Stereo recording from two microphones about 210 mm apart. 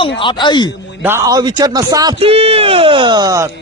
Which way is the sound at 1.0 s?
15° right (ahead or behind).